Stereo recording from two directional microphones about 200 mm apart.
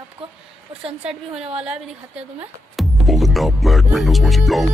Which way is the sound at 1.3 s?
30° right (ahead or behind).